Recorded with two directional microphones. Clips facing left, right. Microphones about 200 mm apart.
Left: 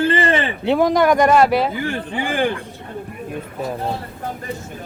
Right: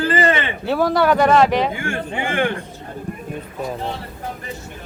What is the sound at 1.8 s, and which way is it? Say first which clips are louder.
Speech: left 1 dB; 35° left (ahead or behind).